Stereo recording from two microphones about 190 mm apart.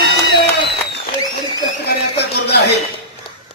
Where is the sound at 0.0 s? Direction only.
60° right (ahead or behind).